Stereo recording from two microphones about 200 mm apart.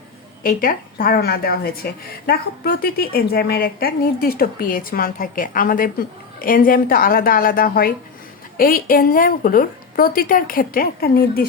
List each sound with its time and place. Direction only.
0.4 s a woman's voice: 45° left (ahead or behind)